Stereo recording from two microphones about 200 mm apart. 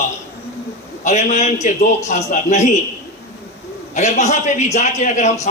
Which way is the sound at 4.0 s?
35° left (ahead or behind).